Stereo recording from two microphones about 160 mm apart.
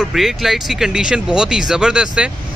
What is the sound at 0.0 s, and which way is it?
Speech, centre (ahead or behind).